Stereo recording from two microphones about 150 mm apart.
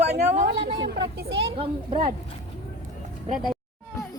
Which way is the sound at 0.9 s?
90° right.